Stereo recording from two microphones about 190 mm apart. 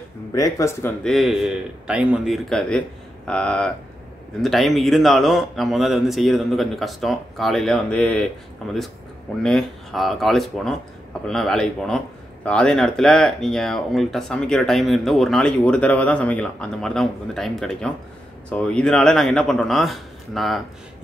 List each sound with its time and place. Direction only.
0.3 s speech: 15° left (ahead or behind)
1.0 s speech: centre (ahead or behind)